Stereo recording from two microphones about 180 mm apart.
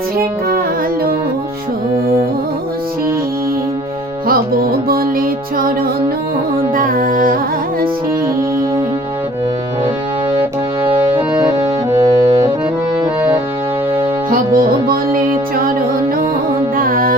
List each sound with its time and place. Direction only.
4.3 s music: 55° right (ahead or behind)
6.7 s music: 50° right (ahead or behind)
14.3 s music: 50° right (ahead or behind)
16.7 s music: 50° right (ahead or behind)